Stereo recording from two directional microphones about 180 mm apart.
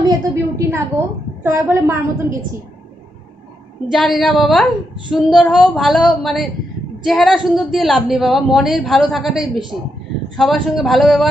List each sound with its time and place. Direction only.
0.1 s a woman's voice: 15° right (ahead or behind)
3.9 s a woman's voice: centre (ahead or behind)